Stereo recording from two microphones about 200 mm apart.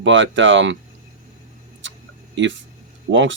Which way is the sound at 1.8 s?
65° right (ahead or behind).